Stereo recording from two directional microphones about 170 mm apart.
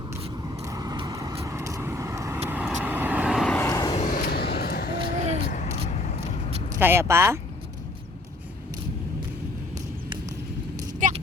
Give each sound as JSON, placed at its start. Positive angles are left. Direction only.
{"t": 0.6, "sound": "vehicle", "side_deg": -20}
{"t": 3.7, "sound": "vehicle", "side_deg": 20}
{"t": 3.9, "sound": "vehicle", "side_deg": 50}
{"t": 6.7, "sound": "speech", "side_deg": -15}
{"t": 11.0, "sound": "a sound", "side_deg": -50}